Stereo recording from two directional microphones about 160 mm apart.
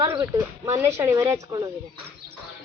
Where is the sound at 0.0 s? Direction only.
20° right (ahead or behind).